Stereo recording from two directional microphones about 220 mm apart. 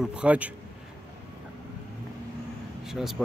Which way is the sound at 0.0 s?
5° right (ahead or behind).